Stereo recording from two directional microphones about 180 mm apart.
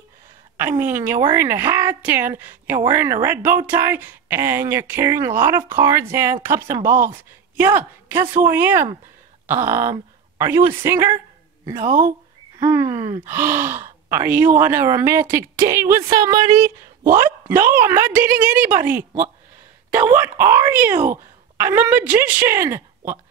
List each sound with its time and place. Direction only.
0.6 s a woman's voice: 10° right (ahead or behind)